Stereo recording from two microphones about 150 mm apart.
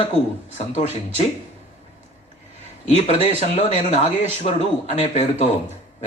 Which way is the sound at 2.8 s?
45° left (ahead or behind).